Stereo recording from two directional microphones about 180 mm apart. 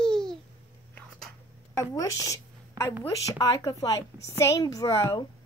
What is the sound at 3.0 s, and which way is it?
Speech, 20° left (ahead or behind).